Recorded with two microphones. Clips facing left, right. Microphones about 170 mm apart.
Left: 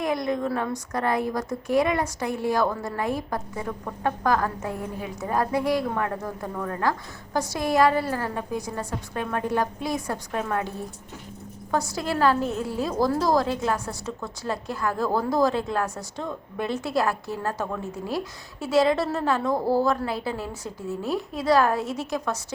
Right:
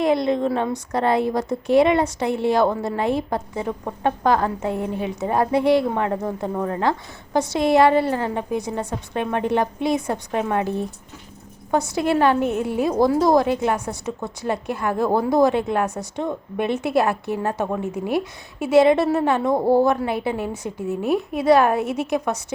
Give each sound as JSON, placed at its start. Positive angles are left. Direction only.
{"t": 0.0, "sound": "a woman's voice", "side_deg": -30}